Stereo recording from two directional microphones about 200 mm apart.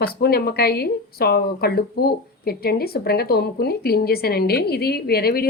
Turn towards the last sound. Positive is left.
turn(degrees=50)  # may be behind; listen again after turning